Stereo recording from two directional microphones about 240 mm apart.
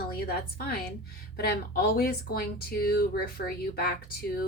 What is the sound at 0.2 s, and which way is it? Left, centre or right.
Speech, left.